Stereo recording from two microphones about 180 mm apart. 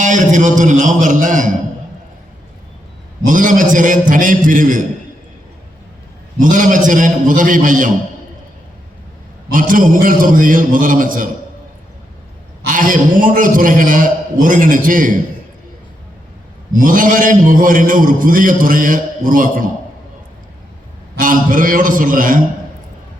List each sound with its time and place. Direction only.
0.0 s a man's voice: 45° right (ahead or behind)
3.2 s a man's voice: 50° right (ahead or behind)
6.4 s a man's voice: 45° right (ahead or behind)
9.5 s a man's voice: 50° right (ahead or behind)
12.6 s a man's voice: 50° right (ahead or behind)
16.7 s a man's voice: 50° right (ahead or behind)
21.2 s a man's voice: 50° right (ahead or behind)